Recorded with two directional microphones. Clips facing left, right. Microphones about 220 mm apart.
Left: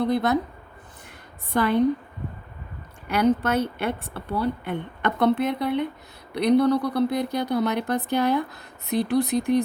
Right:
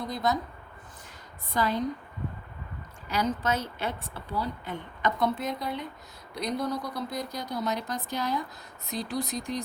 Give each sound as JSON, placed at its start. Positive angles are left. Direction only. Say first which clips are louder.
{"t": 0.0, "sound": "speech", "louder": "left 7 dB", "side_deg": 65}
{"t": 1.5, "sound": "speech", "louder": "left 8 dB", "side_deg": 60}
{"t": 3.1, "sound": "speech", "louder": "left 7 dB", "side_deg": 60}